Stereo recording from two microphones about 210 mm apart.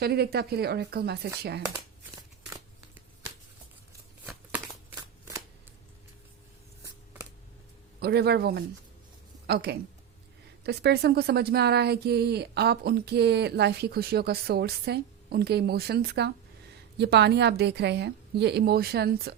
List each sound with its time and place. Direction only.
0.0 s speech: 50° right (ahead or behind)
8.0 s speech: 50° right (ahead or behind)